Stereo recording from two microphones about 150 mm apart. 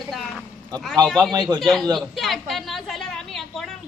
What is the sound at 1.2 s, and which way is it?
Speech, 25° right (ahead or behind).